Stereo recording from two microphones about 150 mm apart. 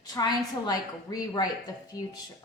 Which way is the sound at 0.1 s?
25° left (ahead or behind).